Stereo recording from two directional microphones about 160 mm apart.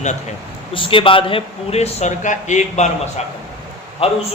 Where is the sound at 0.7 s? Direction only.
35° left (ahead or behind).